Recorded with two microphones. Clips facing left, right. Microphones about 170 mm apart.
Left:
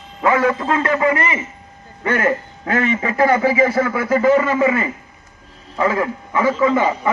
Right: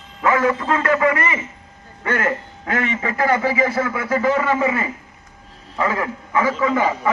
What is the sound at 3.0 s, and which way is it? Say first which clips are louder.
A man's voice: left 3 dB; 25° left (ahead or behind).